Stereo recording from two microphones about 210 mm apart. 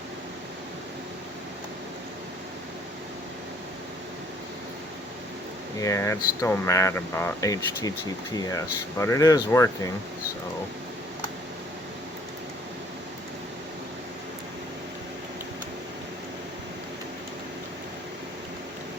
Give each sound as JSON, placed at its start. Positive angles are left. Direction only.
{"t": 5.8, "sound": "speech", "side_deg": 15}